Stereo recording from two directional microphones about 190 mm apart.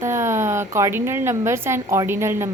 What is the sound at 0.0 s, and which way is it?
A woman's voice, 15° right (ahead or behind).